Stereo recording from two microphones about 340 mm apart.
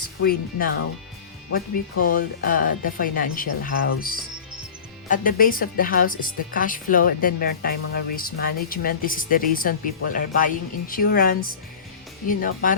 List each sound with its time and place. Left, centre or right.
0.2 s speech: left
5.0 s speech: left